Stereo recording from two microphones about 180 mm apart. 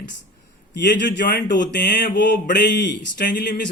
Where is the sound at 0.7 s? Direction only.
75° left (ahead or behind).